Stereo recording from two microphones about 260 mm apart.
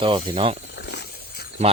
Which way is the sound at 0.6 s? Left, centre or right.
Left.